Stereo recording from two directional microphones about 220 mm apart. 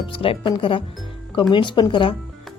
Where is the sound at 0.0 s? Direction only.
25° left (ahead or behind).